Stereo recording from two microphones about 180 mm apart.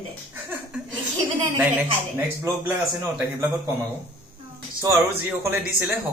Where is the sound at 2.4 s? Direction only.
10° right (ahead or behind).